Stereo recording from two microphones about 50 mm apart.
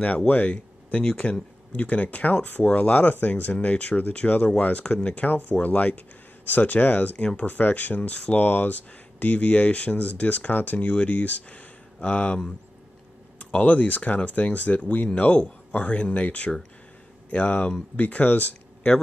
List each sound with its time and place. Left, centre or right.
0.2 s speech: left
13.5 s speech: left